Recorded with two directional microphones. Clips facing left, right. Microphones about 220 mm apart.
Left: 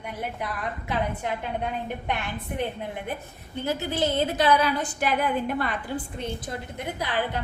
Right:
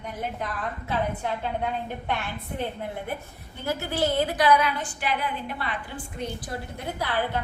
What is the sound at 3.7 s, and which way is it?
A woman's voice, 20° left (ahead or behind).